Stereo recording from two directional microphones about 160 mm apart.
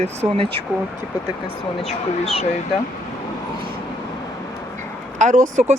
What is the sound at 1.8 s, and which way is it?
Speech, 40° left (ahead or behind).